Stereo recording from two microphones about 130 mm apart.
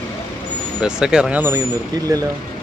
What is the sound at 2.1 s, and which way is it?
Speech, 30° right (ahead or behind).